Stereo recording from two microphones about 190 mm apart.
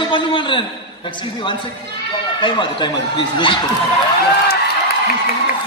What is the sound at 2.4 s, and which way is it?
A man's voice, 25° left (ahead or behind).